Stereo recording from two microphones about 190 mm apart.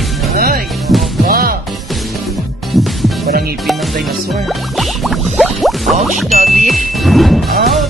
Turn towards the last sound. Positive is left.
turn(degrees=0)  # may be behind; listen again after turning